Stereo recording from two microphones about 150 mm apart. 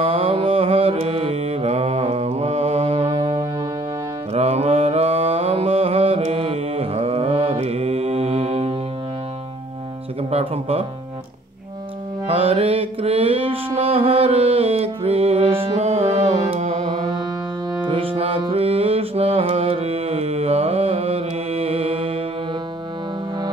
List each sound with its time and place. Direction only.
0.0 s mantra: 35° right (ahead or behind)
10.3 s music: 45° right (ahead or behind)
12.3 s mantra: 40° right (ahead or behind)
17.8 s music: 40° right (ahead or behind)